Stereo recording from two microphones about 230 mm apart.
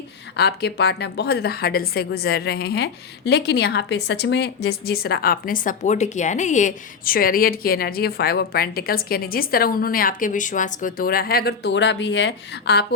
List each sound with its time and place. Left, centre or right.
0.3 s a woman's voice: left